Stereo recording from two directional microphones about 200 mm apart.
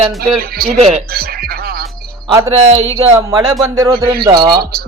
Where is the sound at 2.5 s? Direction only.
30° right (ahead or behind).